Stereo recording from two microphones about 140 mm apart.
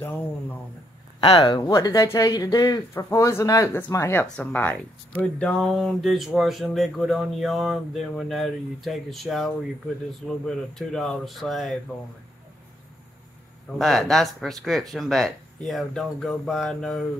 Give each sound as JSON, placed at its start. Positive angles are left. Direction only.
{"t": 1.2, "sound": "speech", "side_deg": 40}
{"t": 1.6, "sound": "speech", "side_deg": 20}
{"t": 13.7, "sound": "speech", "side_deg": 0}